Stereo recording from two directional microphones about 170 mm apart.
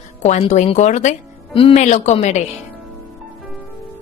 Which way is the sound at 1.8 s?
45° left (ahead or behind).